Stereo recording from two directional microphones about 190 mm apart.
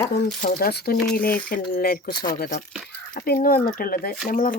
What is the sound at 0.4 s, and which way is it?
Speech, 50° left (ahead or behind).